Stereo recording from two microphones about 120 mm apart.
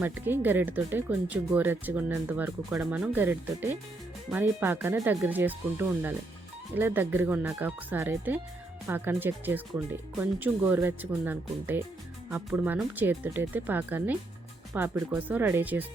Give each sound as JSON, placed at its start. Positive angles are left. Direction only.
{"t": 0.0, "sound": "speech", "side_deg": -15}